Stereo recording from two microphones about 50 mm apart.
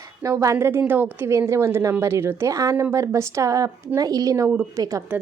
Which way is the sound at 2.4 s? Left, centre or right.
Right.